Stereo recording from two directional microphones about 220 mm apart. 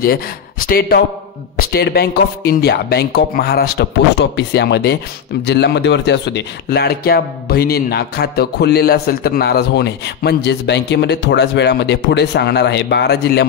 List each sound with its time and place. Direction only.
0.0 s speech: 40° left (ahead or behind)